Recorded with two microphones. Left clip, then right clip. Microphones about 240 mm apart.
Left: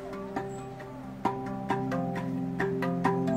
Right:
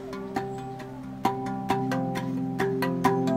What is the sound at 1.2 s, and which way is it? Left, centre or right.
Music, right.